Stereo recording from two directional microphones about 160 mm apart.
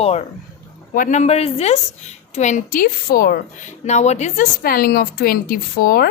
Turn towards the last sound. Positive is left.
turn(degrees=70)  # may be behind; listen again after turning